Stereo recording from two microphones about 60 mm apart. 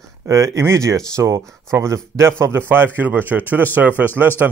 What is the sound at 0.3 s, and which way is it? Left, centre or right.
A man's voice, right.